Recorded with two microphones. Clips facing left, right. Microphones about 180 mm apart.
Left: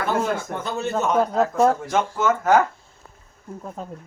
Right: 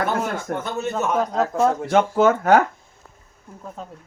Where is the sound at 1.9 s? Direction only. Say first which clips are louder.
Right 5 dB; 60° right (ahead or behind).